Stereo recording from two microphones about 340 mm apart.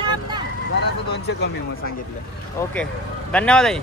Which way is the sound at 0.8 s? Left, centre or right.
Left.